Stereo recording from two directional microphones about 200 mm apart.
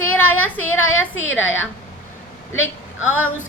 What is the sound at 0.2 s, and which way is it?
Female singing, 10° left (ahead or behind).